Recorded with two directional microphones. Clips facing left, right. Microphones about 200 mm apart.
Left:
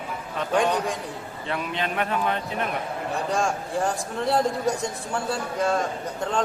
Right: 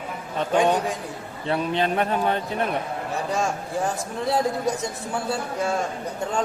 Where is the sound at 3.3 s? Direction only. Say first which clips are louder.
Even; 5° right (ahead or behind).